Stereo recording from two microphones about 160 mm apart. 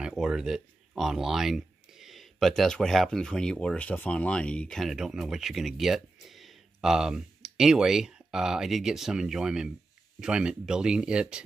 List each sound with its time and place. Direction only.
0.0 s speech: 5° right (ahead or behind)